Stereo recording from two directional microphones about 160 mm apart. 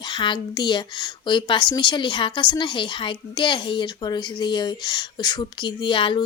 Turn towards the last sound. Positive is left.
turn(degrees=30)  # may be behind; listen again after turning